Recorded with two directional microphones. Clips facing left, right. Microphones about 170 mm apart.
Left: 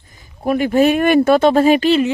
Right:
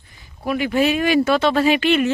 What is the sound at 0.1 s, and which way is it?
Speech, 45° left (ahead or behind).